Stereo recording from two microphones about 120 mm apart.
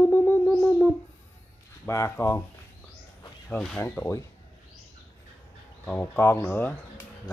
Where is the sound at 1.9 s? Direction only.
20° left (ahead or behind).